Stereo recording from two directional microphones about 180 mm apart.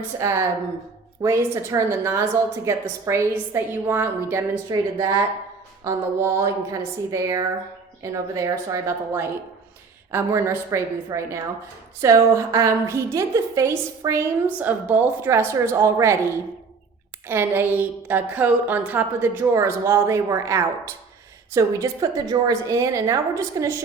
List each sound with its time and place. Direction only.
0.2 s a woman's voice: 15° right (ahead or behind)
17.2 s a woman's voice: 10° right (ahead or behind)